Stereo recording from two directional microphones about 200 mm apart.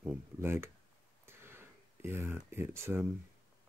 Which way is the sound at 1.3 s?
10° right (ahead or behind).